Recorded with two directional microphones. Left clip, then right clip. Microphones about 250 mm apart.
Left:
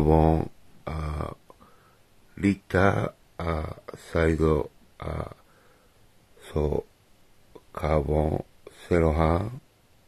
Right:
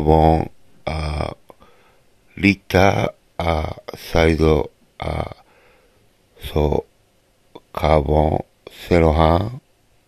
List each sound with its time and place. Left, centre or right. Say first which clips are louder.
0.0 s a sound: right 7 dB; centre
2.3 s speech: right 9 dB; centre
6.4 s speech: right 8 dB; centre